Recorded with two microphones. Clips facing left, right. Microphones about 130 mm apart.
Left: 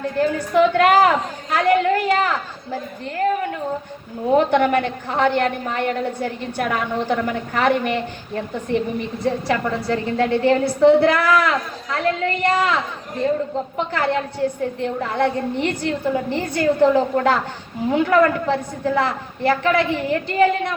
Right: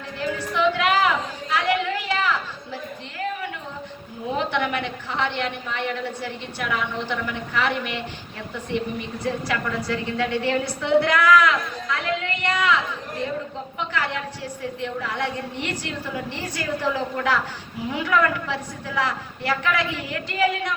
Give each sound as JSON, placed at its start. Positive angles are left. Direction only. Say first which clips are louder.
{"t": 0.0, "sound": "a sound", "louder": "left 8 dB", "side_deg": 45}
{"t": 4.3, "sound": "a woman's voice", "louder": "left 9 dB", "side_deg": 45}
{"t": 16.8, "sound": "a woman's voice", "louder": "left 9 dB", "side_deg": 45}